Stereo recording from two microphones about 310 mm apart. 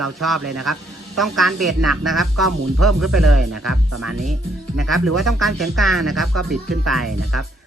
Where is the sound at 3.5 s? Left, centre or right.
Right.